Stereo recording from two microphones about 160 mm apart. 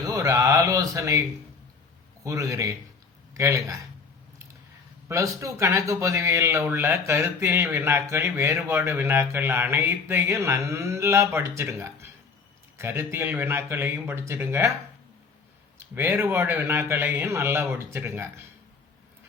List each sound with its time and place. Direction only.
0.0 s speech: 20° right (ahead or behind)
2.2 s a man's voice: 20° right (ahead or behind)
5.0 s speech: 20° right (ahead or behind)
15.8 s speech: 15° right (ahead or behind)